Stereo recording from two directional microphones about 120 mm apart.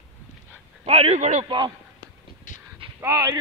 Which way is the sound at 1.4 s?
40° right (ahead or behind).